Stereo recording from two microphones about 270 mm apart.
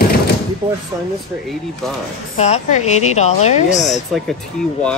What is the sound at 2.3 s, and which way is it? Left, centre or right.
A woman's voice, left.